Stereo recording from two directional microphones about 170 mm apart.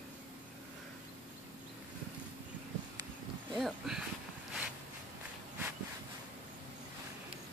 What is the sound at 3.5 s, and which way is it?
Speech, centre (ahead or behind).